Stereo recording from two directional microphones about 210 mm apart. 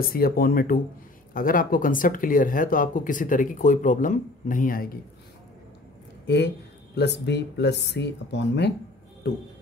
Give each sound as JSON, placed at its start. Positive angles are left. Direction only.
{"t": 0.0, "sound": "speech", "side_deg": 45}
{"t": 6.2, "sound": "speech", "side_deg": 55}